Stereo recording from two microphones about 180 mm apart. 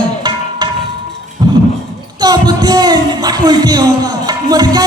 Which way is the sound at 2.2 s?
20° right (ahead or behind).